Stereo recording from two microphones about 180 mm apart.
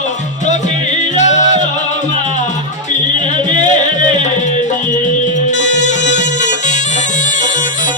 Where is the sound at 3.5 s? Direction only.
45° left (ahead or behind).